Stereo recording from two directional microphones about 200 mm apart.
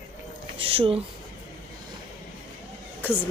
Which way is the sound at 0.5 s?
30° right (ahead or behind).